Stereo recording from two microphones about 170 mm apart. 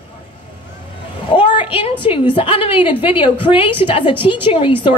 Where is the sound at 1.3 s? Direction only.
30° left (ahead or behind).